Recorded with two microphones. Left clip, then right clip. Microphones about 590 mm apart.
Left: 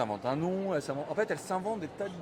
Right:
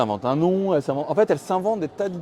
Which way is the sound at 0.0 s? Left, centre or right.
Right.